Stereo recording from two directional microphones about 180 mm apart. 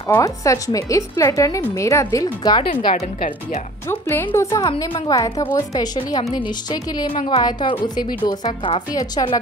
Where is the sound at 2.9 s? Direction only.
45° left (ahead or behind).